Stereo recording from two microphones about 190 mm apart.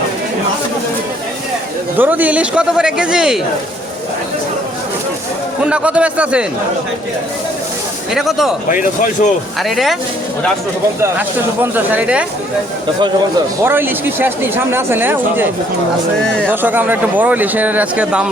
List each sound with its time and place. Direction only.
2.0 s a man's voice: 10° right (ahead or behind)
5.6 s speech: 5° right (ahead or behind)
8.1 s a man's voice: centre (ahead or behind)
8.7 s speech: 45° left (ahead or behind)
9.6 s a man's voice: centre (ahead or behind)
11.0 s speech: 10° right (ahead or behind)
13.7 s speech: 10° right (ahead or behind)